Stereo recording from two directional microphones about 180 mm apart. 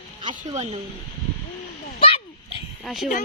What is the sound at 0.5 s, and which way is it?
Speech, 35° right (ahead or behind).